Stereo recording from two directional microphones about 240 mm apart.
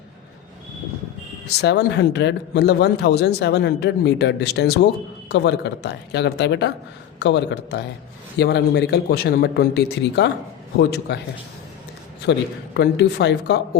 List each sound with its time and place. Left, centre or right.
1.5 s a man's voice: left
12.3 s a man's voice: left